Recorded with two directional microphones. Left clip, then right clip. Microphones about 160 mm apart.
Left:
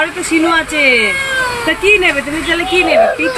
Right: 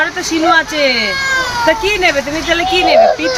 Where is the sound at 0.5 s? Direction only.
15° right (ahead or behind).